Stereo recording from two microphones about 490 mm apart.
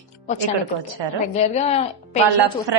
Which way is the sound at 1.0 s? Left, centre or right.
Right.